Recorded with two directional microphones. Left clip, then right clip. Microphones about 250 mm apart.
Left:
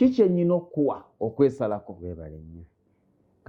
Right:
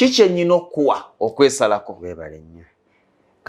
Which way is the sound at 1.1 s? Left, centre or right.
Right.